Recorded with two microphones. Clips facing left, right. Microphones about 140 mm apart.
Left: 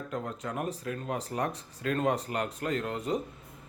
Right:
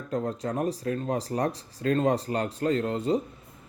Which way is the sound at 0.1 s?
35° right (ahead or behind).